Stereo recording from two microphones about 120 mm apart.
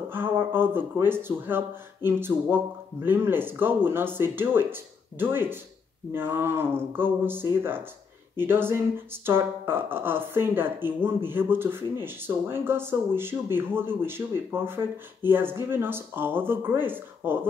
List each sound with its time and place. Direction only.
0.1 s speech: 20° right (ahead or behind)